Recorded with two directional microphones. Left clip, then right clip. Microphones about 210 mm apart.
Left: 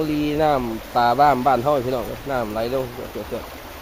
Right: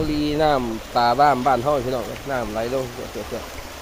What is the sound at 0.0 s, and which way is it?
Speech, 10° left (ahead or behind).